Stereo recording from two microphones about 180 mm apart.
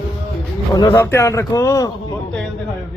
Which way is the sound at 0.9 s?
15° left (ahead or behind).